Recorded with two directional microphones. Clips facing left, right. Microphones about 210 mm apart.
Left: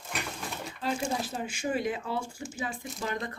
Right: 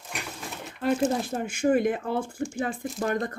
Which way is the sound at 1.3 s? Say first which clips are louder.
Right 8 dB; 55° right (ahead or behind).